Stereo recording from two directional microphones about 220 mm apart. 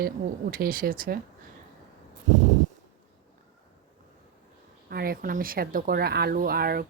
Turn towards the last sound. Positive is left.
turn(degrees=-45)  # may be behind; listen again after turning